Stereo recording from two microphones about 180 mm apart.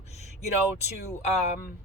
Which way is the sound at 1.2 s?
40° left (ahead or behind).